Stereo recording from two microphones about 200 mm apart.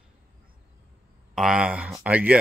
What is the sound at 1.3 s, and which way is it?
Speech, 5° right (ahead or behind).